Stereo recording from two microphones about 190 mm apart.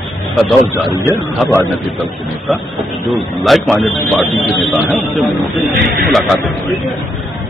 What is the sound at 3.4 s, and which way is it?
Speech, centre (ahead or behind).